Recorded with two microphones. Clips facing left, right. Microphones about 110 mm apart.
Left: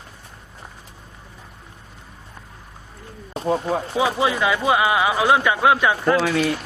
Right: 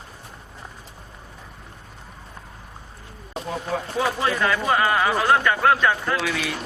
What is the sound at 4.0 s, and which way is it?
Speech, 10° left (ahead or behind).